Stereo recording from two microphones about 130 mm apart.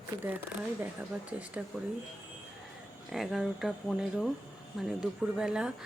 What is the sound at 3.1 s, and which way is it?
Speech, centre (ahead or behind).